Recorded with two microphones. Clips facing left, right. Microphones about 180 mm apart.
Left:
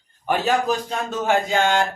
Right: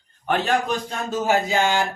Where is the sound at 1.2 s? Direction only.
5° right (ahead or behind).